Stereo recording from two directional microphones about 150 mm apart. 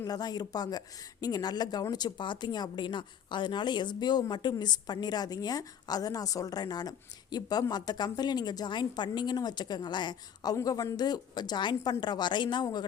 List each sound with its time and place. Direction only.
0.0 s speech: 25° left (ahead or behind)